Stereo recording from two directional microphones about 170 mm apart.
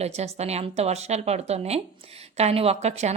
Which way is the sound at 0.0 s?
40° right (ahead or behind).